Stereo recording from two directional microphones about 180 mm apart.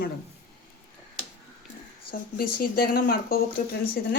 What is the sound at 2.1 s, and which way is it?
A woman's voice, 55° left (ahead or behind).